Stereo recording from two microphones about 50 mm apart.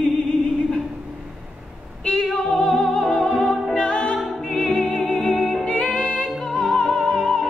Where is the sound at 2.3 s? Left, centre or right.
Centre.